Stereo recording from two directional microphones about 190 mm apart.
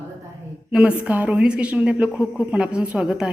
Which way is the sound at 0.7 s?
5° right (ahead or behind).